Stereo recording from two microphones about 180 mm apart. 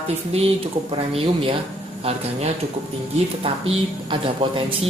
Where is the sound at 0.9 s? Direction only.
30° right (ahead or behind).